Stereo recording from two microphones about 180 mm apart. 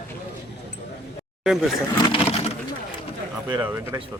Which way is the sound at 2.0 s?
30° left (ahead or behind).